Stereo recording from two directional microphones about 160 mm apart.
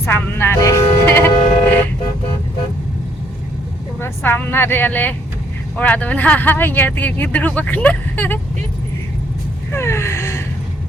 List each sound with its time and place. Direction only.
0.0 s music: 15° left (ahead or behind)
4.0 s a woman's voice: 10° left (ahead or behind)
9.7 s gasp: 15° left (ahead or behind)